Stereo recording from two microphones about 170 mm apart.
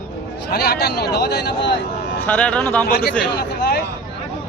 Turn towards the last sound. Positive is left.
turn(degrees=75)  # may be behind; listen again after turning